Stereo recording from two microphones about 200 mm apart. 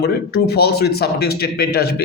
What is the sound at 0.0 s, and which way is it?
Speech, 55° left (ahead or behind).